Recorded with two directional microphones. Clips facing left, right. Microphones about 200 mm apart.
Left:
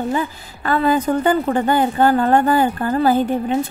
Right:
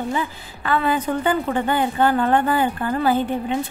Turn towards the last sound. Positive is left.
turn(degrees=40)  # may be behind; listen again after turning